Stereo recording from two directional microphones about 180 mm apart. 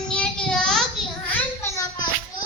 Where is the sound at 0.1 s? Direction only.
5° left (ahead or behind).